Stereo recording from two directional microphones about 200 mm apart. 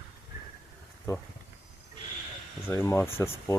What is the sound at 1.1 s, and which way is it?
Speech, 15° left (ahead or behind).